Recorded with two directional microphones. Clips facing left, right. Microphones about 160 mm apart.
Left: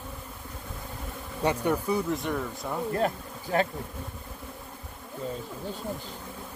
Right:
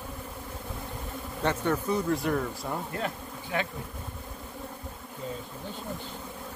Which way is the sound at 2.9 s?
40° left (ahead or behind).